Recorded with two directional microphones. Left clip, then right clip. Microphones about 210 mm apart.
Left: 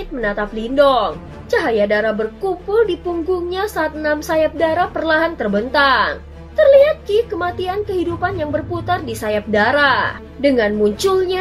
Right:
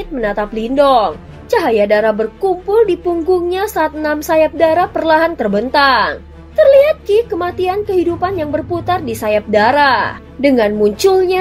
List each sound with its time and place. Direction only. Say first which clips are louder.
0.2 s a woman's voice: right 3 dB; 35° right (ahead or behind)